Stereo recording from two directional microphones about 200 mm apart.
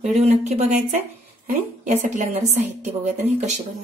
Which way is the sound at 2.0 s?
35° right (ahead or behind).